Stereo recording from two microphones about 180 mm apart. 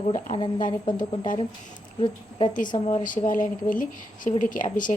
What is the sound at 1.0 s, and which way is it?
Speech, 50° left (ahead or behind).